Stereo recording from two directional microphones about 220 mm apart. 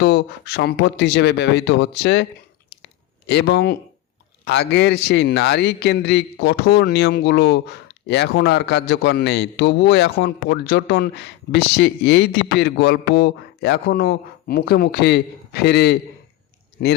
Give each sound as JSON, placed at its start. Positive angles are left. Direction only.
{"t": 0.0, "sound": "a man's voice", "side_deg": 50}
{"t": 3.2, "sound": "a man's voice", "side_deg": 50}